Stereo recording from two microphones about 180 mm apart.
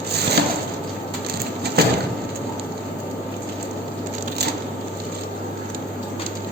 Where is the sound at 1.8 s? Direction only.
65° right (ahead or behind).